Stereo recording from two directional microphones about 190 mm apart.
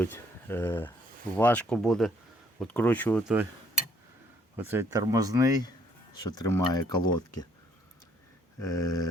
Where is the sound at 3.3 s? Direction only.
5° right (ahead or behind).